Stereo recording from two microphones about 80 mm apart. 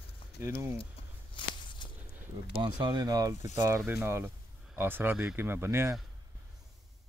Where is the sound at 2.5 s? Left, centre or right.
Right.